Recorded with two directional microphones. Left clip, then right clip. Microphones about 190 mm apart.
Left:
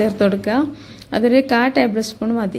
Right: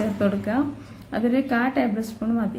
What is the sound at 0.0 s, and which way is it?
Speech, 40° left (ahead or behind).